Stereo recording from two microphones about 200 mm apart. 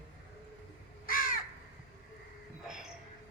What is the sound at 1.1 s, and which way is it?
Crow, 45° left (ahead or behind).